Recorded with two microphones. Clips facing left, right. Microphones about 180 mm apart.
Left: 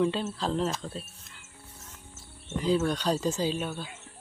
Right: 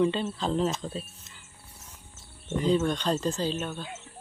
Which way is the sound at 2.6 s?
Centre (ahead or behind).